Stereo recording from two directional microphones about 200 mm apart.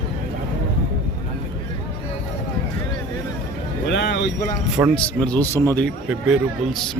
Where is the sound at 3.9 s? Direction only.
60° left (ahead or behind).